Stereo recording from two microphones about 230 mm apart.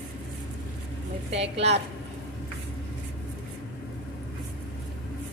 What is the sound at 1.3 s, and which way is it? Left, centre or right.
Speech, right.